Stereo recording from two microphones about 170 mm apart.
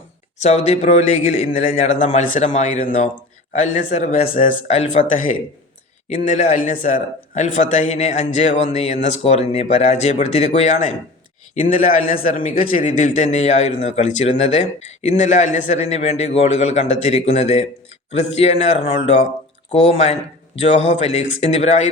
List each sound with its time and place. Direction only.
0.3 s a man's voice: 40° left (ahead or behind)
4.3 s speech: 50° left (ahead or behind)
4.7 s a man's voice: 40° left (ahead or behind)